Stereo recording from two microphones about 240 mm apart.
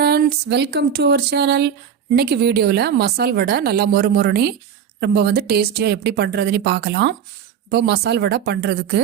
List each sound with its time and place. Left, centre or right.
0.0 s a woman's voice: right